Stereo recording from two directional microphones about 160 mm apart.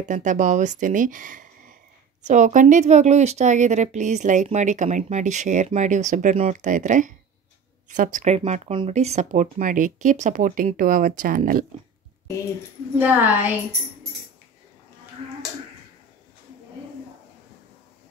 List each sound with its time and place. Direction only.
0.1 s speech: 50° right (ahead or behind)
13.0 s speech: 10° right (ahead or behind)